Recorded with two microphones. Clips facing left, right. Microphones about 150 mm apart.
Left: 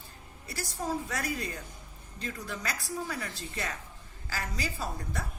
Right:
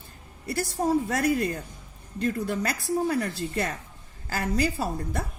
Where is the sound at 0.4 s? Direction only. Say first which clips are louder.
Right 9 dB; 50° right (ahead or behind).